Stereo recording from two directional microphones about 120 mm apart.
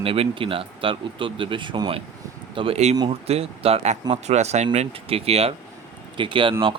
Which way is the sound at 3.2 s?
60° right (ahead or behind).